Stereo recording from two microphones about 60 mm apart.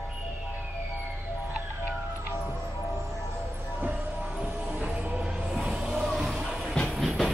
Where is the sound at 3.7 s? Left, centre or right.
Right.